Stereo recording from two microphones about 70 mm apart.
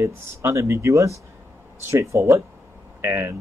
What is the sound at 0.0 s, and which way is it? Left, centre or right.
Speech, right.